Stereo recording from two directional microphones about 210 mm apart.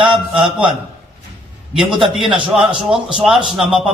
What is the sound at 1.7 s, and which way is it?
A man's voice, 5° right (ahead or behind).